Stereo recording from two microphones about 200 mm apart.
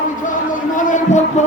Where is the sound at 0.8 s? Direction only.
40° left (ahead or behind).